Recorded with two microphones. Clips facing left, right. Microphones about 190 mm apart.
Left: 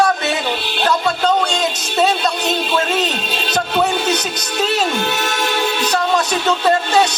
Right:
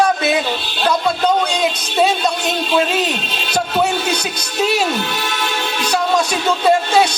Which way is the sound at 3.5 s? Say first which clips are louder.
Right 1 dB; 10° right (ahead or behind).